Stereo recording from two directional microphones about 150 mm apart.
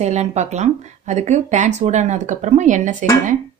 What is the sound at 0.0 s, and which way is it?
Speech, 50° right (ahead or behind).